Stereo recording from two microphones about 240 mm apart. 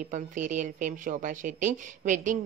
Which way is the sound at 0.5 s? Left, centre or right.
Right.